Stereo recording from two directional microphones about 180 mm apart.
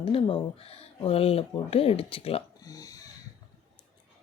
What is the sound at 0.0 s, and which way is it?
Speech, 30° left (ahead or behind).